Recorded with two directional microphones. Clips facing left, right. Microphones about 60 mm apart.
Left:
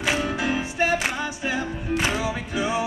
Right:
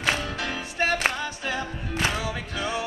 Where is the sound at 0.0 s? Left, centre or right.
Centre.